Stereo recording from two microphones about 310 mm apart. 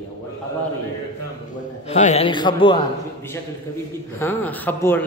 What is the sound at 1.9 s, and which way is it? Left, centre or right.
Speech, left.